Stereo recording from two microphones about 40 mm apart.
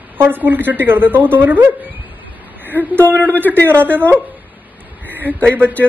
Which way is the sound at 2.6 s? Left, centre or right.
Right.